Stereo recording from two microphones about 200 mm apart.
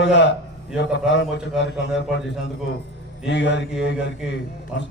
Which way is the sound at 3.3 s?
60° left (ahead or behind).